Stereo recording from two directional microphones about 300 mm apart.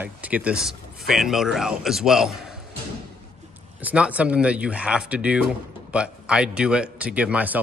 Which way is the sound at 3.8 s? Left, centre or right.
Centre.